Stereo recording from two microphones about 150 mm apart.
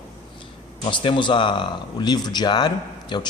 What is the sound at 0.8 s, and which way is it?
A man's voice, 35° left (ahead or behind).